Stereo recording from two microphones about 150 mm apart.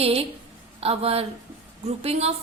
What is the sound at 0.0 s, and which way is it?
A woman's voice, 40° right (ahead or behind).